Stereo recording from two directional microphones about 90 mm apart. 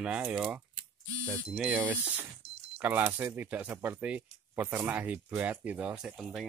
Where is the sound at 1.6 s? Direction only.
15° right (ahead or behind).